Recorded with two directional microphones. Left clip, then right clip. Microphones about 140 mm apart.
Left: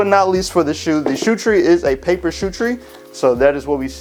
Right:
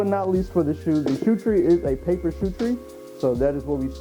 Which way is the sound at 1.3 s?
20° left (ahead or behind).